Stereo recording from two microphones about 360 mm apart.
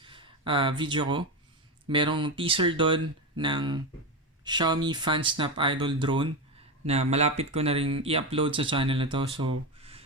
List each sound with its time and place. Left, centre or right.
0.0 s speech: centre